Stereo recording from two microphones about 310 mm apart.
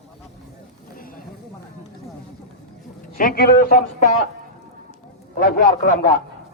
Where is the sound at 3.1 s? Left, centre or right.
Left.